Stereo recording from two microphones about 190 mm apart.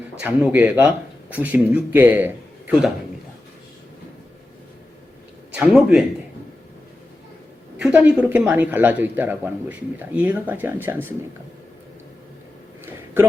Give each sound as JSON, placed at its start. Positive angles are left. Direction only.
{"t": 0.2, "sound": "speech", "side_deg": -5}
{"t": 5.5, "sound": "speech", "side_deg": -5}
{"t": 7.8, "sound": "speech", "side_deg": -5}